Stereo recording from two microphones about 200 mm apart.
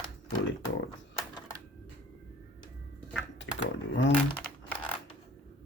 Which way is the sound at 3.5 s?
90° left.